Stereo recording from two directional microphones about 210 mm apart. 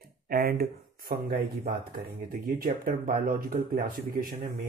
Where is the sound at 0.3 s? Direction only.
45° right (ahead or behind).